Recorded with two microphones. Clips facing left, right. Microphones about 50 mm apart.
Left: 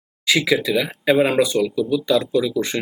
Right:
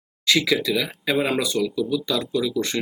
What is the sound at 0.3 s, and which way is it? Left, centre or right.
Speech, centre.